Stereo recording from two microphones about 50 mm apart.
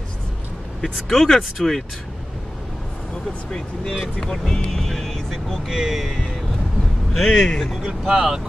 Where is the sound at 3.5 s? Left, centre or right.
Centre.